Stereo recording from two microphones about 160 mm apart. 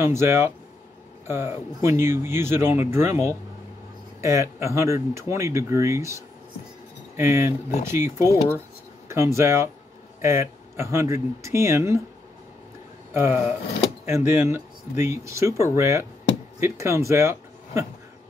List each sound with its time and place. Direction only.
0.0 s speech: 15° right (ahead or behind)
13.1 s speech: 15° right (ahead or behind)